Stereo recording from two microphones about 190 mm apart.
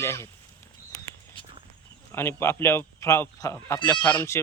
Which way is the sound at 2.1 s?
15° left (ahead or behind).